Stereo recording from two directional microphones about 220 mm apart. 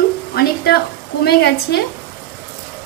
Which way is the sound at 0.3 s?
45° left (ahead or behind).